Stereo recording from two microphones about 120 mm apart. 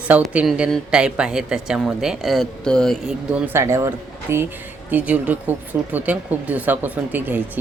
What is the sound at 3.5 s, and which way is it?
Speech, 20° right (ahead or behind).